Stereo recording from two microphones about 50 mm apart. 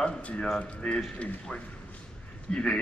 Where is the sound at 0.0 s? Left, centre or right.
Left.